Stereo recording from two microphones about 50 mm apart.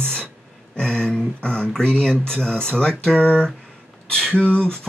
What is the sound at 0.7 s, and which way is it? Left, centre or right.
Speech, centre.